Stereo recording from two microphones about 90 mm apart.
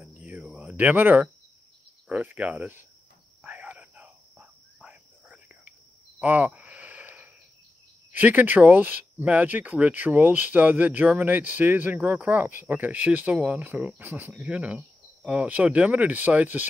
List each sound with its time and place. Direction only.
0.0 s cricket: 15° right (ahead or behind)
2.0 s speech: 15° right (ahead or behind)
3.4 s a sound: 15° right (ahead or behind)
4.8 s whispering: 15° right (ahead or behind)
8.1 s speech: 20° right (ahead or behind)